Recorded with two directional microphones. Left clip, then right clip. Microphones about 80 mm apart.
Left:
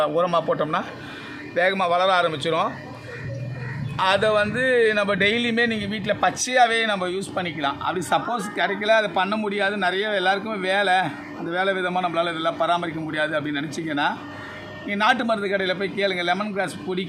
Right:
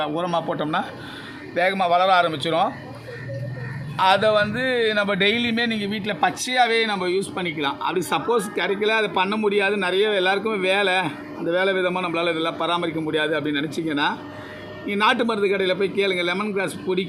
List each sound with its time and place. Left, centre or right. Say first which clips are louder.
0.0 s speech: left 3 dB; left
1.5 s speech: right 1 dB; centre
3.9 s speech: right 2 dB; centre; by 17.1 s left